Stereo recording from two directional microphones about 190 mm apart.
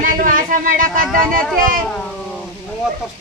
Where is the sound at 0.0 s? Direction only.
45° right (ahead or behind).